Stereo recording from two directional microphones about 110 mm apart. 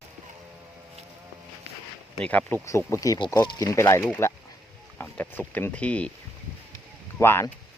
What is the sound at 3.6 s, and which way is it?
Speech, 30° left (ahead or behind).